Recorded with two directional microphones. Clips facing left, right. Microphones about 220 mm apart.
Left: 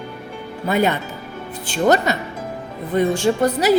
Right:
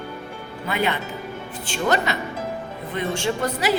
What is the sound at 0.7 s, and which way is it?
Speech, 40° left (ahead or behind).